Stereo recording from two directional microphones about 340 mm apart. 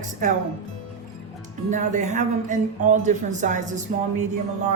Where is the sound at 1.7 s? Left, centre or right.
Right.